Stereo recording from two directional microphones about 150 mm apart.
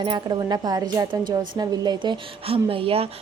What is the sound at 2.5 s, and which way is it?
Speech, 40° right (ahead or behind).